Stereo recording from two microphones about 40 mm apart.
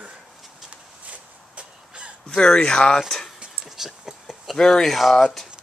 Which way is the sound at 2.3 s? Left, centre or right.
Left.